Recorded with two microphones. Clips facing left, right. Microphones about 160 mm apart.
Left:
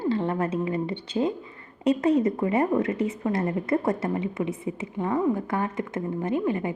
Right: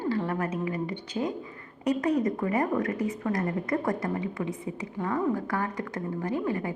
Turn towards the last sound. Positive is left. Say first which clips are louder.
# left 3 dB
turn(degrees=20)  # may be behind; listen again after turning